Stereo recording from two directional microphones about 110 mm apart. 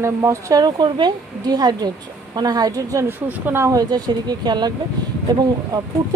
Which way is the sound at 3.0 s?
15° right (ahead or behind).